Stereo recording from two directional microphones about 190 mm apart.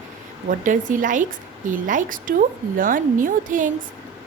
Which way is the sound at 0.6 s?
45° right (ahead or behind).